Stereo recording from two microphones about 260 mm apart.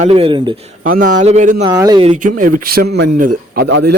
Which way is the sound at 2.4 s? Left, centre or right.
Right.